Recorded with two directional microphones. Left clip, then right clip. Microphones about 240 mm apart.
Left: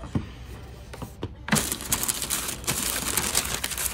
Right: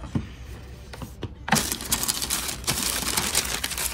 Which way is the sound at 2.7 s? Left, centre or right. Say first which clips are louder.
Right 2 dB; centre.